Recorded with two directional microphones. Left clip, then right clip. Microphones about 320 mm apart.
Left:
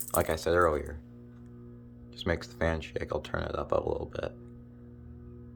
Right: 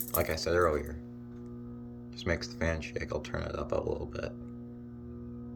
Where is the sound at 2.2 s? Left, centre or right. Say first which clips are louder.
Left 2 dB; centre.